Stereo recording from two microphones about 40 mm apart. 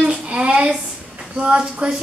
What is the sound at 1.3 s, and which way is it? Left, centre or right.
Speech, right.